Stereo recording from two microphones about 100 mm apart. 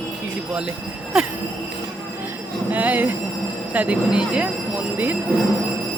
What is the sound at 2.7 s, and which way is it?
A woman's voice, 15° right (ahead or behind).